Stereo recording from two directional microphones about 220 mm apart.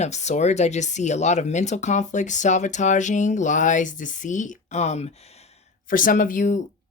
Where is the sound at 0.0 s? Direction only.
30° left (ahead or behind).